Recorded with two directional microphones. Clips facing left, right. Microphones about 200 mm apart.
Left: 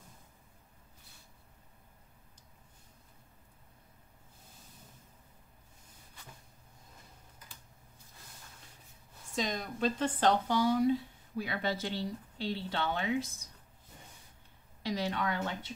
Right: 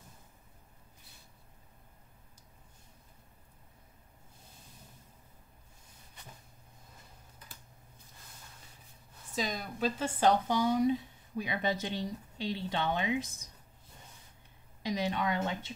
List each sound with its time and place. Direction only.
9.3 s speech: 5° right (ahead or behind)
14.8 s speech: 15° right (ahead or behind)